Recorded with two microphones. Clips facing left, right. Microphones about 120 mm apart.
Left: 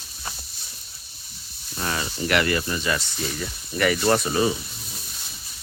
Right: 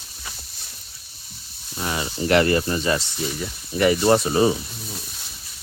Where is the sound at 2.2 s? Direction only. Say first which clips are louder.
Right 5 dB; 30° right (ahead or behind).